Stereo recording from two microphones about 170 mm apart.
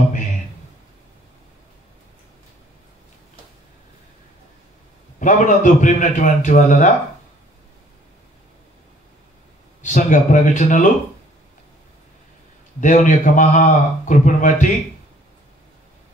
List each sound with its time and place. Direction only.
5.2 s a man's voice: 50° left (ahead or behind)
9.8 s a man's voice: 45° left (ahead or behind)
12.8 s a man's voice: 50° left (ahead or behind)